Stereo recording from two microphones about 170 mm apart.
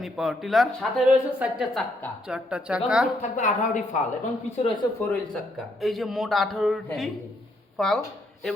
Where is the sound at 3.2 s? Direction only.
45° left (ahead or behind).